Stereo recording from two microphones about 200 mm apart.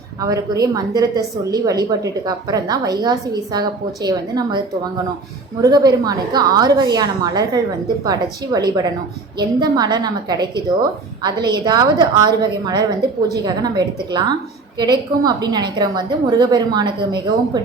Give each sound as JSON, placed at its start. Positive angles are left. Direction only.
{"t": 0.2, "sound": "a woman's voice", "side_deg": -15}
{"t": 5.6, "sound": "a woman's voice", "side_deg": -20}